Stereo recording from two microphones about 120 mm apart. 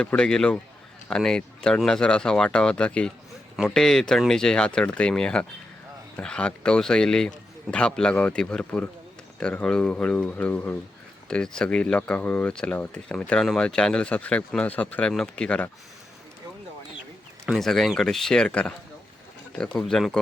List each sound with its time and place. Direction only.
0.0 s speech: 10° left (ahead or behind)
17.4 s speech: centre (ahead or behind)